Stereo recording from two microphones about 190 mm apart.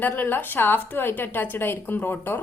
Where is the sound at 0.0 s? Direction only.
10° left (ahead or behind).